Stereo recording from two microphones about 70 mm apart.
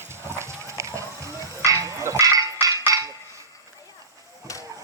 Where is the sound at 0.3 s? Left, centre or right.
Right.